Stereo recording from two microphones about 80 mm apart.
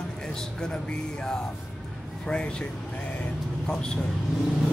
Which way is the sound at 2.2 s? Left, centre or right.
Centre.